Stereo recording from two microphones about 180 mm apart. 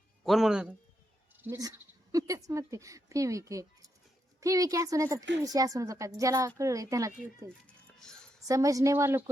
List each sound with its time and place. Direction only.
0.3 s speech: centre (ahead or behind)
1.4 s speech: 15° right (ahead or behind)
7.7 s music: 5° left (ahead or behind)
8.4 s speech: 20° right (ahead or behind)